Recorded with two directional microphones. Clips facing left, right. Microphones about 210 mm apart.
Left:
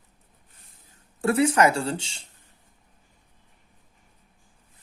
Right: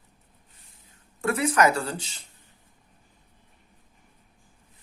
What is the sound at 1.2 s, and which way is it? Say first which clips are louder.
Speech: left 2 dB; 30° left (ahead or behind).